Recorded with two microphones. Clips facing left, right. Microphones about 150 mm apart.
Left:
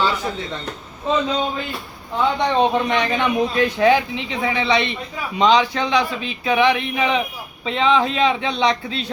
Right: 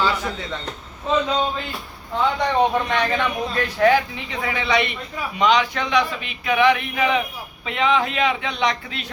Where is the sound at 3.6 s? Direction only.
20° left (ahead or behind).